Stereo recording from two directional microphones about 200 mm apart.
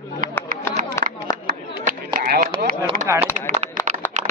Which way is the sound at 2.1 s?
45° right (ahead or behind).